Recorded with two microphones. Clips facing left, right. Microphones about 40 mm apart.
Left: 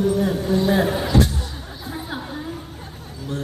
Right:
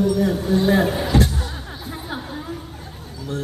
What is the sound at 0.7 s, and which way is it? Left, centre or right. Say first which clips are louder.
Speech: right 1 dB; centre.